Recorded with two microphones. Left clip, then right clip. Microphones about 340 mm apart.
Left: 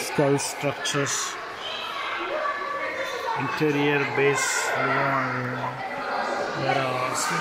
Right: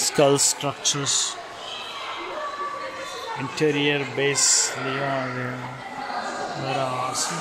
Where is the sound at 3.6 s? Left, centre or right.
Right.